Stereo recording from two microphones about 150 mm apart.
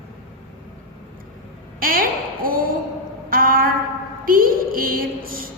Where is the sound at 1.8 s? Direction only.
75° right (ahead or behind).